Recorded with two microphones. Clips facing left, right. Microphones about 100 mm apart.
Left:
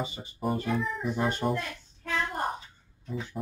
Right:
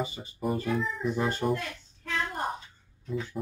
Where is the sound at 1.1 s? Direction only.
15° left (ahead or behind).